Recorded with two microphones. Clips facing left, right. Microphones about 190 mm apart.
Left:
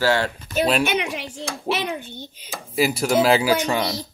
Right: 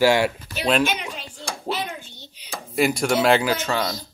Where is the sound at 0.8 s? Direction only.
70° left (ahead or behind).